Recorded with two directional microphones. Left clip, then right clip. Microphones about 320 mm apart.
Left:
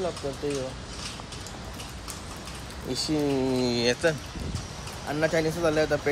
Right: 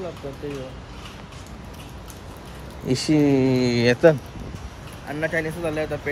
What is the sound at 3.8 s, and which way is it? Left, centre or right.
Speech, centre.